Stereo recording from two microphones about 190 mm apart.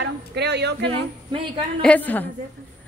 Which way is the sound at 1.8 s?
5° left (ahead or behind).